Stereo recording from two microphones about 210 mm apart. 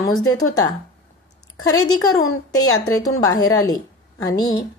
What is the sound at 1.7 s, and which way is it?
Speech, 15° left (ahead or behind).